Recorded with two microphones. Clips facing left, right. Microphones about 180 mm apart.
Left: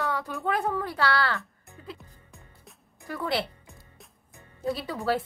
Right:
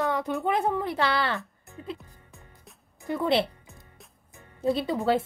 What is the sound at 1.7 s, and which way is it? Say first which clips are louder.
Music: right 5 dB; 20° right (ahead or behind).